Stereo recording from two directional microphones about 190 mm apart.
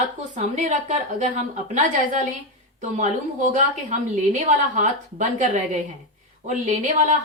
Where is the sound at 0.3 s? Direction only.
40° right (ahead or behind).